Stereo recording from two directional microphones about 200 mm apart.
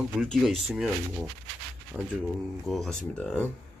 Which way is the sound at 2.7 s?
5° left (ahead or behind).